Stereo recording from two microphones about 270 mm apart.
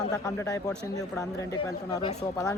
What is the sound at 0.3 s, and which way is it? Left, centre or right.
Speech, centre.